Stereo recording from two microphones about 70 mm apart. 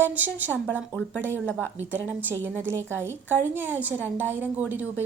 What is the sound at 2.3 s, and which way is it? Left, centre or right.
A woman's voice, right.